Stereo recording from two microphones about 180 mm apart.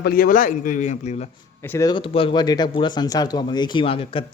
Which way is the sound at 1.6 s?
15° left (ahead or behind).